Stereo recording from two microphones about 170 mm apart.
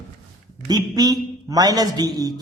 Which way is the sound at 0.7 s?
25° right (ahead or behind).